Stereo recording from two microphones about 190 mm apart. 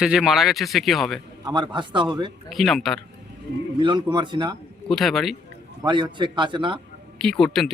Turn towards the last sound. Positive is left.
turn(degrees=0)  # may be behind; listen again after turning